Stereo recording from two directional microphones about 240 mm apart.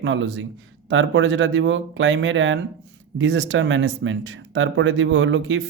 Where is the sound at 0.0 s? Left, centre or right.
Right.